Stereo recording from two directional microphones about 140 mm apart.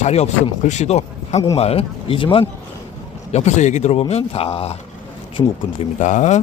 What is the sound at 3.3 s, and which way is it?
Speech, 55° left (ahead or behind).